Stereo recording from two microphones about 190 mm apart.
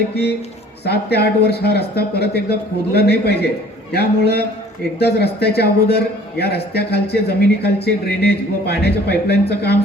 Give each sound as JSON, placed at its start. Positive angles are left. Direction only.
{"t": 0.1, "sound": "speech", "side_deg": 60}